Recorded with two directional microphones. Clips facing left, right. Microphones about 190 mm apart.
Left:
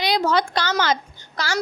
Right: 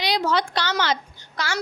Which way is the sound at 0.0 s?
50° left (ahead or behind).